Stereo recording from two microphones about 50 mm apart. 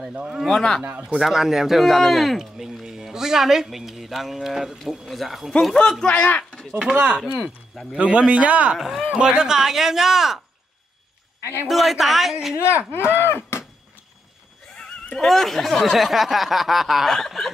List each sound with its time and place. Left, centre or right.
0.5 s a man's voice: centre
1.2 s speech: centre
5.8 s a man's voice: centre
6.1 s speech: left
6.8 s speech: centre
8.7 s speech: centre
9.1 s speech: centre
11.6 s speech: centre
12.5 s speech: left
13.1 s a sound: left
14.7 s neigh: centre
15.1 s speech: centre